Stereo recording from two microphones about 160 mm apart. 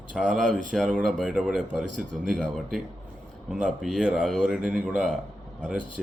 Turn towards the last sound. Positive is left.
turn(degrees=-5)  # may be behind; listen again after turning